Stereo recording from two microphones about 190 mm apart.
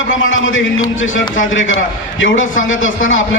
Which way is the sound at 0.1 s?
90° left.